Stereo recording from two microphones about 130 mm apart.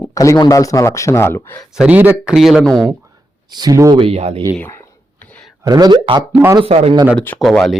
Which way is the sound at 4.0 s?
50° right (ahead or behind).